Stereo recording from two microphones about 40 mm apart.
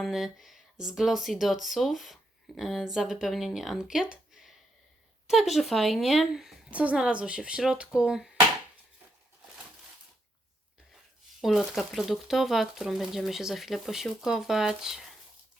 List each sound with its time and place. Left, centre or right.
0.1 s speech: centre
5.3 s speech: centre
6.7 s a woman's voice: right
6.9 s a woman's voice: right
11.3 s speech: centre